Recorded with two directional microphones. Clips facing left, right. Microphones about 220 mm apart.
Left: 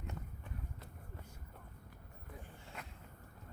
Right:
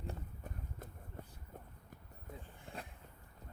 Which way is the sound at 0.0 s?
35° right (ahead or behind).